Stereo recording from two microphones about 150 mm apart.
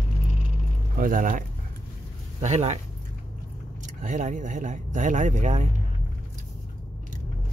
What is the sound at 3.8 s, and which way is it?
Speech, 55° right (ahead or behind).